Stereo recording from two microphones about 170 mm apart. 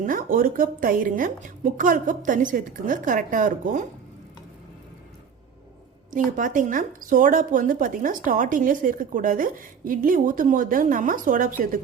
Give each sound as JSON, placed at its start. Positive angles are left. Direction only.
{"t": 0.0, "sound": "a woman's voice", "side_deg": -55}
{"t": 6.1, "sound": "a woman's voice", "side_deg": -50}